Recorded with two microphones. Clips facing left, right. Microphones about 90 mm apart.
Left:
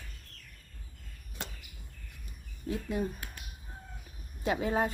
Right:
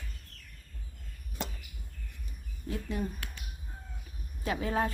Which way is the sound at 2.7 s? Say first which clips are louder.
Left 2 dB; 20° left (ahead or behind).